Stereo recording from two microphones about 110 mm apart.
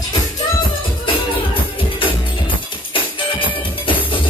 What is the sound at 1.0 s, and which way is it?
Music, 50° left (ahead or behind).